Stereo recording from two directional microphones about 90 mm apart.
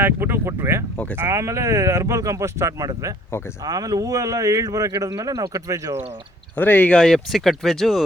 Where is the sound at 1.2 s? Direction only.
35° right (ahead or behind).